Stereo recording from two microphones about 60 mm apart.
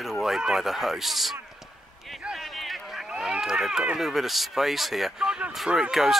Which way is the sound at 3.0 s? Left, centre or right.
Centre.